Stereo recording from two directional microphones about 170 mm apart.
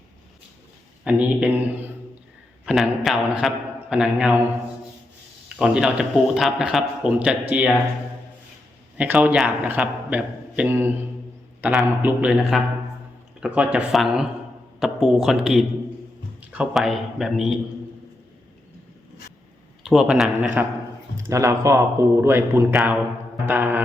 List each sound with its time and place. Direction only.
1.0 s a man's voice: 5° right (ahead or behind)
5.5 s a man's voice: 5° right (ahead or behind)
9.0 s a man's voice: 10° right (ahead or behind)
19.8 s a man's voice: centre (ahead or behind)
21.2 s a man's voice: 15° right (ahead or behind)
22.7 s a man's voice: 5° right (ahead or behind)